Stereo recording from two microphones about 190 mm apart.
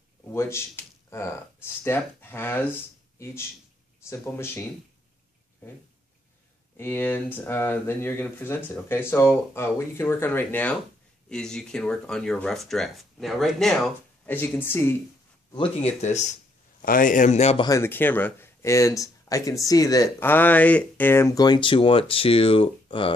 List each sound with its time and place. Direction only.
0.3 s speech: 15° left (ahead or behind)
4.1 s speech: 15° left (ahead or behind)
6.8 s speech: 10° left (ahead or behind)
15.5 s speech: 30° left (ahead or behind)
17.6 s speech: 15° left (ahead or behind)